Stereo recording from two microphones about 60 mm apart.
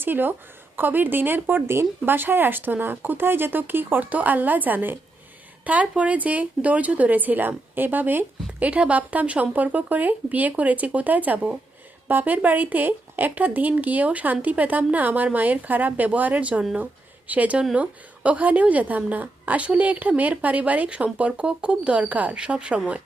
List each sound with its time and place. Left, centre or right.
0.0 s speech: right; by 22.8 s centre